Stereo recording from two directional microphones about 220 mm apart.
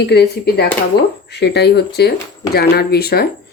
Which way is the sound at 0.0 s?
45° left (ahead or behind).